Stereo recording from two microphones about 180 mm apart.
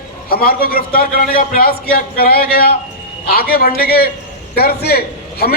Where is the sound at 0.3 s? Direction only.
55° left (ahead or behind).